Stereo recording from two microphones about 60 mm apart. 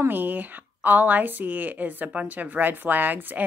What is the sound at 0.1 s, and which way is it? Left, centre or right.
Speech, right.